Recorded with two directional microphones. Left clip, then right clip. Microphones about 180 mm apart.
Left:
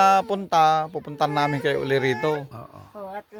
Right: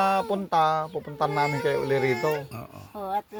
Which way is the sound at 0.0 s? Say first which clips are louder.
Left 6 dB; 40° left (ahead or behind).